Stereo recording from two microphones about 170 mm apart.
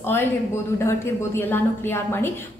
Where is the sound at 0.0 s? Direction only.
15° left (ahead or behind).